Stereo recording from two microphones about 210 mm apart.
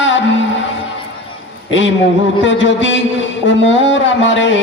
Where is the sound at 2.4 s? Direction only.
60° left (ahead or behind).